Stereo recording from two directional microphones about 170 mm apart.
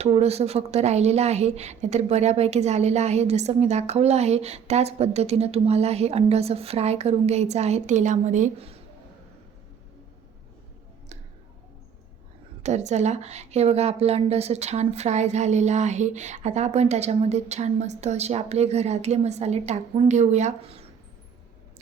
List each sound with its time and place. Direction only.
0.0 s a woman's voice: 40° right (ahead or behind)
12.6 s a woman's voice: 40° right (ahead or behind)